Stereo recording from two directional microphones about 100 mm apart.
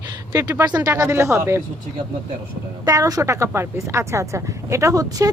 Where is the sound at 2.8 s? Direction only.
35° right (ahead or behind).